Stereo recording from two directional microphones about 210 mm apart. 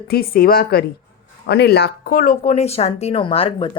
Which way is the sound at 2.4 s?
30° left (ahead or behind).